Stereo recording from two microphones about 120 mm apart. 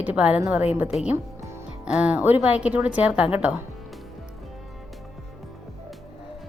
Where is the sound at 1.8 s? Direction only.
10° right (ahead or behind).